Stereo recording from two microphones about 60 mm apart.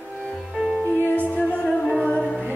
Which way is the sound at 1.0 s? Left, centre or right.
Left.